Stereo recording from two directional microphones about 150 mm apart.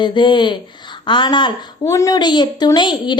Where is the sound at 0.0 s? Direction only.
30° left (ahead or behind).